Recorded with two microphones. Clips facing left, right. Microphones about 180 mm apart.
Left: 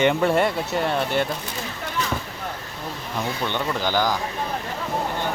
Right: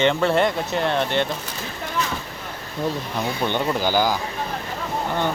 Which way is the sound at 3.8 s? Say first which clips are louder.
Right 1 dB; 5° right (ahead or behind).